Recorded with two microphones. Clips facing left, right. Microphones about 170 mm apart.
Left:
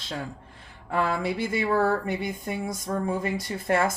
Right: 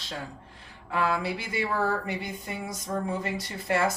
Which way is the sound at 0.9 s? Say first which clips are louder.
Left 2 dB; 50° left (ahead or behind).